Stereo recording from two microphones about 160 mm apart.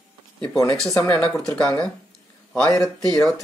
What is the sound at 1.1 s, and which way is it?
Speech, 5° left (ahead or behind).